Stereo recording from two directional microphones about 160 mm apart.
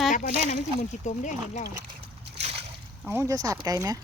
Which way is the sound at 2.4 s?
40° right (ahead or behind).